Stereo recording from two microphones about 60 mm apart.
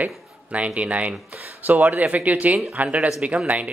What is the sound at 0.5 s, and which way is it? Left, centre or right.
A man's voice, right.